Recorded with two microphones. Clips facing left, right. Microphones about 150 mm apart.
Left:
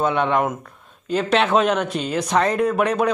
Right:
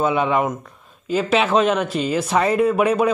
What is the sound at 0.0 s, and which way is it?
Speech, 5° right (ahead or behind).